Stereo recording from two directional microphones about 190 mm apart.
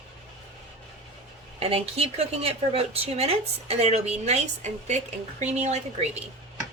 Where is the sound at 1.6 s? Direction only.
30° right (ahead or behind).